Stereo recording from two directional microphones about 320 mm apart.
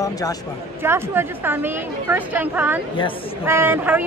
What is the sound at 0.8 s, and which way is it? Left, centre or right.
A woman's voice, centre.